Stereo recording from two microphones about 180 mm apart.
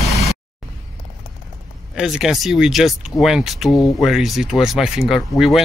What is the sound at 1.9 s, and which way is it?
Speech, centre (ahead or behind).